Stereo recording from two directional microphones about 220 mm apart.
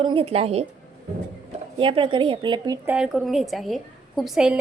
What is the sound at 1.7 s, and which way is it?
A woman's voice, 25° right (ahead or behind).